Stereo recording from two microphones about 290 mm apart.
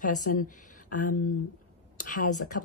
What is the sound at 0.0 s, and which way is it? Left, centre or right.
Speech, left.